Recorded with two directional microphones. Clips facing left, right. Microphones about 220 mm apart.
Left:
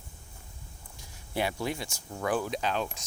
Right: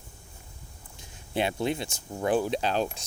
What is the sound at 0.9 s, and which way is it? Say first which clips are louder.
Speech: right 3 dB; 25° right (ahead or behind).